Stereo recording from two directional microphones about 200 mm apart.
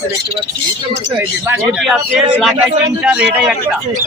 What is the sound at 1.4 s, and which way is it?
A man's voice, centre (ahead or behind).